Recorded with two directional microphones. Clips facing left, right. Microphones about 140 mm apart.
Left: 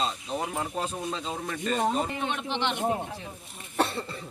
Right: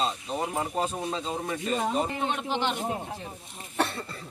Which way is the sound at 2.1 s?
40° right (ahead or behind).